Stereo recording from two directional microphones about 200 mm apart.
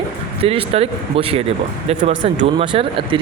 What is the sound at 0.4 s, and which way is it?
Speech, 30° right (ahead or behind).